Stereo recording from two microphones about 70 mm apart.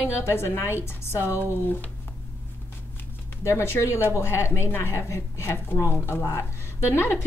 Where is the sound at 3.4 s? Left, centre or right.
Left.